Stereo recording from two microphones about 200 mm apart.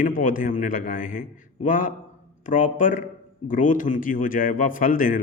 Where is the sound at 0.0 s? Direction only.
40° left (ahead or behind).